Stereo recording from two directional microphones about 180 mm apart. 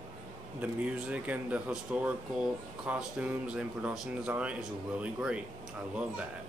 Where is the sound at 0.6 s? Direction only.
5° right (ahead or behind).